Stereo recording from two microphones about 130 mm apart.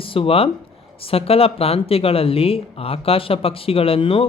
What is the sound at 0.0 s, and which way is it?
Speech, 45° left (ahead or behind).